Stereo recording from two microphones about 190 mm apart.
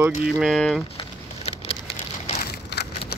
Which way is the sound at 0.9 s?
30° left (ahead or behind).